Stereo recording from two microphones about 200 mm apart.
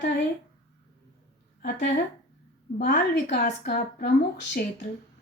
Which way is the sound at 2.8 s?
55° left (ahead or behind).